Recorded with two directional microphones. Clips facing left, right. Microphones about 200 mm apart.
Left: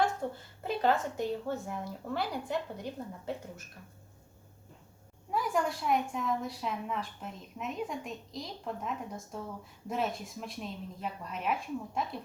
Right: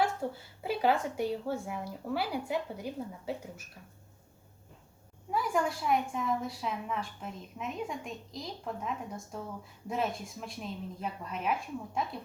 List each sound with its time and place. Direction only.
0.0 s speech: 10° right (ahead or behind)
5.3 s a woman's voice: centre (ahead or behind)